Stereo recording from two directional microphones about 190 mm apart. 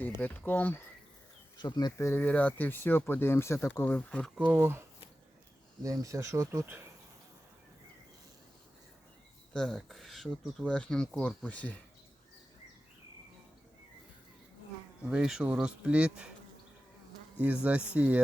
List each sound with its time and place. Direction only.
0.2 s speech: 10° left (ahead or behind)
1.5 s speech: 20° left (ahead or behind); by 4.3 s 5° left (ahead or behind)
4.4 s speech: 10° right (ahead or behind)
5.8 s speech: 15° right (ahead or behind)
9.5 s speech: 5° left (ahead or behind)
15.0 s speech: 5° right (ahead or behind)
17.3 s speech: 5° right (ahead or behind)